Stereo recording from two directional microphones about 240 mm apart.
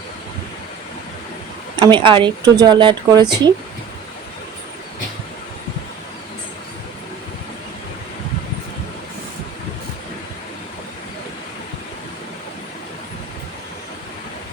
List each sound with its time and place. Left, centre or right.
1.8 s speech: centre